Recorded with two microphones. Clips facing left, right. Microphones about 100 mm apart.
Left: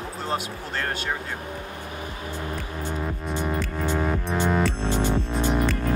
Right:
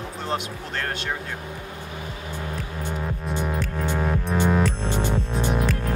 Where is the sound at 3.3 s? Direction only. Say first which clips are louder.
Even; centre (ahead or behind).